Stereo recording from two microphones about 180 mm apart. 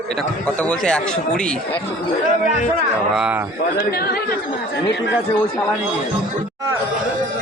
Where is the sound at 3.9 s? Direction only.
60° left (ahead or behind).